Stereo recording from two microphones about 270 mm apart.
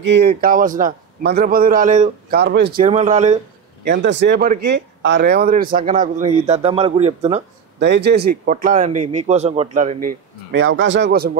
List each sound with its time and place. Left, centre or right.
0.0 s a man's voice: right
3.8 s a man's voice: right
7.8 s a man's voice: right
10.6 s a man's voice: right